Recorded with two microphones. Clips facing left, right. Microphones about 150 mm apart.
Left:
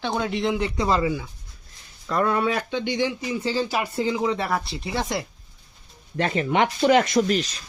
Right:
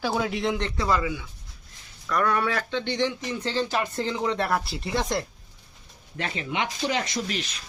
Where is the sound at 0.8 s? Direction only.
25° left (ahead or behind); by 5.2 s 5° left (ahead or behind).